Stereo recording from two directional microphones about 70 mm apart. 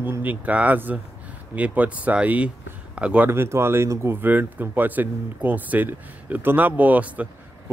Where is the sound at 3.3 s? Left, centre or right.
Right.